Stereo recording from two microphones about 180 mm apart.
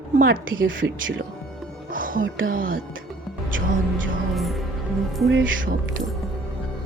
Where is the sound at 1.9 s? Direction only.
50° right (ahead or behind).